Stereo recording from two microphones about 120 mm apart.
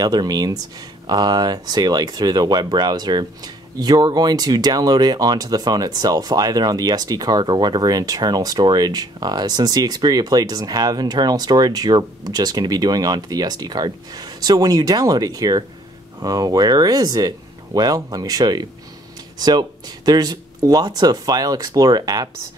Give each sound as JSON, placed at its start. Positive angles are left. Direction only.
{"t": 0.0, "sound": "speech", "side_deg": -35}